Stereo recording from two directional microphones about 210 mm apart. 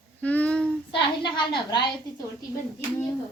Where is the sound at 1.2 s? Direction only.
20° left (ahead or behind).